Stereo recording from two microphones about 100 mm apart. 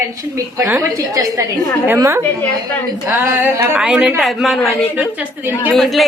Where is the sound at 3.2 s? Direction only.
20° right (ahead or behind).